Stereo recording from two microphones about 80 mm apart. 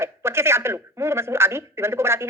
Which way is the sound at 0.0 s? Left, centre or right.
Right.